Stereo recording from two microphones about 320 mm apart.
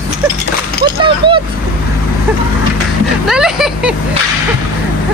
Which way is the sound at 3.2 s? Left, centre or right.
Centre.